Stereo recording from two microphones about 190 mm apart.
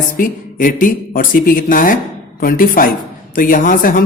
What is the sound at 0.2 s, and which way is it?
Speech, 45° left (ahead or behind).